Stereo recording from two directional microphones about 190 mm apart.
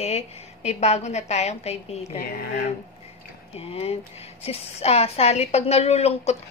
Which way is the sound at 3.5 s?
30° left (ahead or behind).